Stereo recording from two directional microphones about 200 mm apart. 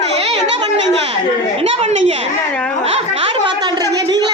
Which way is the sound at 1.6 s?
30° right (ahead or behind).